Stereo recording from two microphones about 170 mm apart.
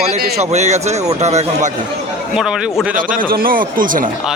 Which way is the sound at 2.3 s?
5° right (ahead or behind).